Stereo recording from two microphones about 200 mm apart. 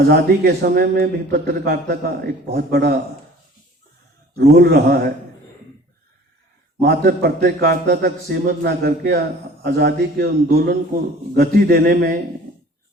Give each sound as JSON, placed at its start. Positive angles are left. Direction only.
{"t": 0.0, "sound": "a man's voice", "side_deg": -50}
{"t": 4.4, "sound": "a man's voice", "side_deg": -50}
{"t": 6.8, "sound": "a man's voice", "side_deg": -55}